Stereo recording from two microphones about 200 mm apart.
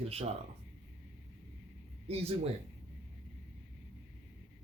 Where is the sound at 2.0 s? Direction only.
30° right (ahead or behind).